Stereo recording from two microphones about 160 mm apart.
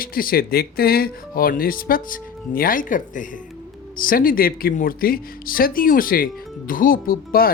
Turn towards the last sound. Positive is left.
turn(degrees=65)  # may be behind; listen again after turning